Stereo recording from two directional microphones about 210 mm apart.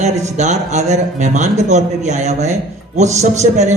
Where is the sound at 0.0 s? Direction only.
35° right (ahead or behind).